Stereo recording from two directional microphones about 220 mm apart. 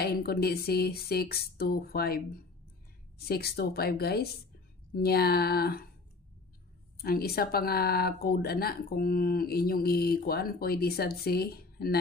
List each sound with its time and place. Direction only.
0.0 s speech: 45° left (ahead or behind)
7.0 s speech: 45° left (ahead or behind)